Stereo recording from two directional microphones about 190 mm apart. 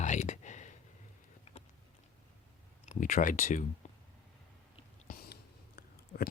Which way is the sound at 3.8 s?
40° left (ahead or behind).